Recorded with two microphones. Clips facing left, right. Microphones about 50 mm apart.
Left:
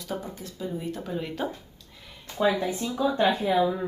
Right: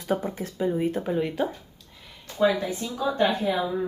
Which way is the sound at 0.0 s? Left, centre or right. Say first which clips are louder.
Right 7 dB; right.